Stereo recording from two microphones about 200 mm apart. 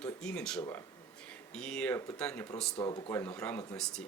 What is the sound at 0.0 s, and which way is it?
Speech, 5° left (ahead or behind).